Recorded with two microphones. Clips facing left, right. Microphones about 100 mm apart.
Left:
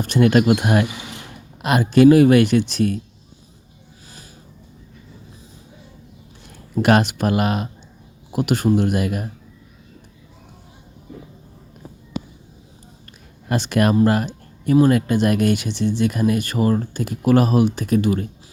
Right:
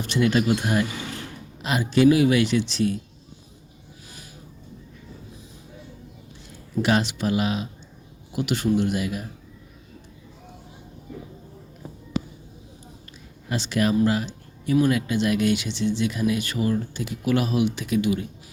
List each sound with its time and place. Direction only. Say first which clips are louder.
0.0 s speech: left 6 dB; 50° left (ahead or behind)
6.5 s speech: left 6 dB; 55° left (ahead or behind)
13.5 s speech: left 5 dB; 55° left (ahead or behind)